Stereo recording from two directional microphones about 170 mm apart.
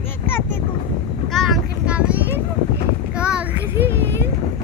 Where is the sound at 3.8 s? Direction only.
90° right.